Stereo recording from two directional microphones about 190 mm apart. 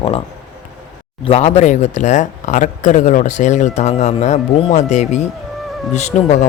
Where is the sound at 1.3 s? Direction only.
35° left (ahead or behind).